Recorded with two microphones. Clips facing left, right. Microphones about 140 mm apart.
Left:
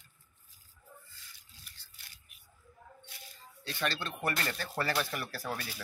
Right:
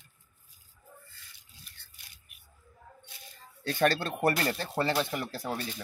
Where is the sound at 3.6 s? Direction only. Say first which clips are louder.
Right 9 dB; 50° right (ahead or behind); by 5.6 s 20° right (ahead or behind).